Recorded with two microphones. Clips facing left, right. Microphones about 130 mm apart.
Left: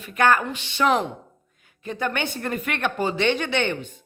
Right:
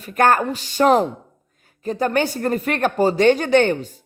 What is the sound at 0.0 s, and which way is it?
Speech, 45° right (ahead or behind).